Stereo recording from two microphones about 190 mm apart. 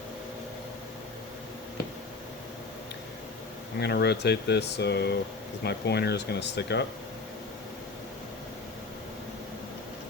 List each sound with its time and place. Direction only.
3.8 s speech: 60° left (ahead or behind)